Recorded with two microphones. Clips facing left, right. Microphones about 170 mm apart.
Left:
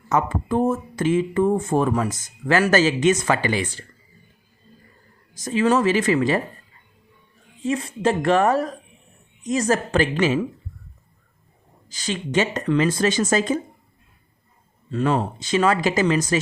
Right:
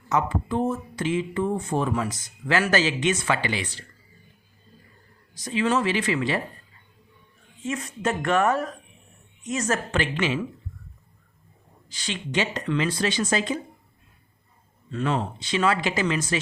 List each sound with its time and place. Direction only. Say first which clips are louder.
0.1 s speech: left 3 dB; 50° left (ahead or behind)
5.3 s speech: left 5 dB; 45° left (ahead or behind)
7.6 s speech: left 6 dB; 30° left (ahead or behind)
11.9 s speech: left 5 dB; 40° left (ahead or behind)
14.8 s speech: left 5 dB; 35° left (ahead or behind)